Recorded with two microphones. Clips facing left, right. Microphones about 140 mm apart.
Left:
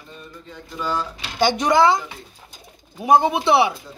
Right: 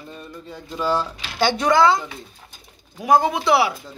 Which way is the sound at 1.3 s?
15° left (ahead or behind).